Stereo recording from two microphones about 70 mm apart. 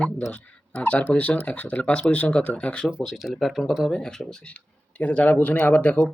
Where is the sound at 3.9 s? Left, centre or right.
Centre.